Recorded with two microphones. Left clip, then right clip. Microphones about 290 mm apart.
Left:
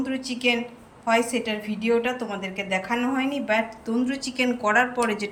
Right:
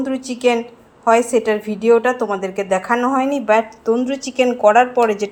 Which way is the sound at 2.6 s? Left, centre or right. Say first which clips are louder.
Right 8 dB; right.